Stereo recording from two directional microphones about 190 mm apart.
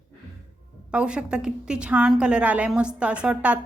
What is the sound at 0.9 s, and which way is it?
A woman's voice, 5° right (ahead or behind).